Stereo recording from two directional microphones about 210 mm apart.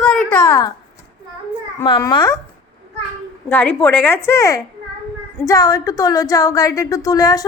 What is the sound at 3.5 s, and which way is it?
A woman's voice, 10° left (ahead or behind).